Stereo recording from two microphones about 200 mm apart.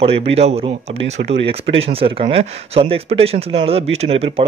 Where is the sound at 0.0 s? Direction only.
30° right (ahead or behind).